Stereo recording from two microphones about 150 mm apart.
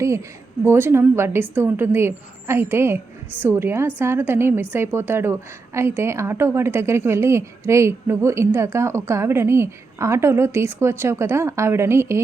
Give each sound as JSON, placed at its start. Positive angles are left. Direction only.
{"t": 0.0, "sound": "a woman's voice", "side_deg": -20}